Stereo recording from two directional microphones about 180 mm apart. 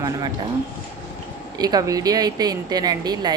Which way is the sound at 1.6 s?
20° right (ahead or behind).